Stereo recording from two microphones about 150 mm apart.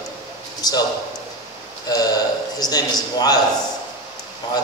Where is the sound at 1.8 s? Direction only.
25° left (ahead or behind).